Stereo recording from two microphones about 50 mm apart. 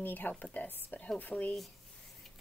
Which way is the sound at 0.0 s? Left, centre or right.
Left.